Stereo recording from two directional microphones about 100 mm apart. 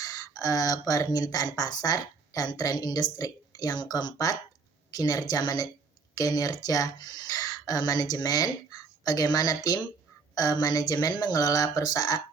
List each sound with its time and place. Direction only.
0.0 s speech: 40° left (ahead or behind)